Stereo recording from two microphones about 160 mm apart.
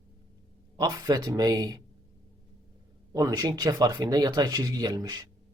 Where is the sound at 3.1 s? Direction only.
20° right (ahead or behind).